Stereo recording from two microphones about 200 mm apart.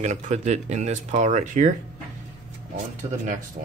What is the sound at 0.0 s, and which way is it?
Speech, 35° right (ahead or behind).